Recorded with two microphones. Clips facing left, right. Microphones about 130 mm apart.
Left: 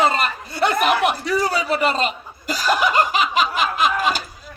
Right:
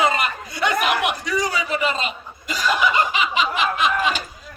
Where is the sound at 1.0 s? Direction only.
35° left (ahead or behind).